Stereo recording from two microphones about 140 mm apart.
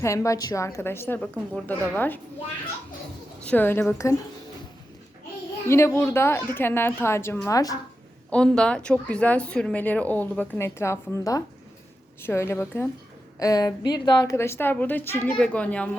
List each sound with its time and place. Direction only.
0.0 s a woman's voice: 20° left (ahead or behind)
1.2 s a woman's voice: 5° left (ahead or behind)
3.4 s speech: 10° left (ahead or behind)
5.6 s speech: 20° left (ahead or behind)
8.3 s a woman's voice: 5° left (ahead or behind)